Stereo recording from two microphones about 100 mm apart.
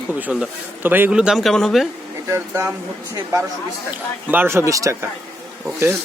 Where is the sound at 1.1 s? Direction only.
5° right (ahead or behind).